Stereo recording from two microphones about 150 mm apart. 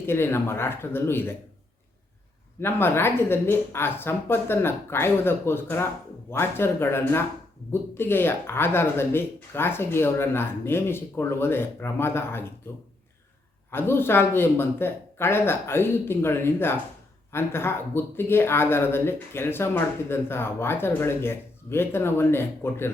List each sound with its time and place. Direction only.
0.0 s speech: 15° left (ahead or behind)
2.6 s speech: 15° left (ahead or behind)
13.7 s speech: 15° left (ahead or behind)